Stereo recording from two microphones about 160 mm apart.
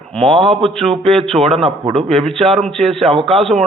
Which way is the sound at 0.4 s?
Centre (ahead or behind).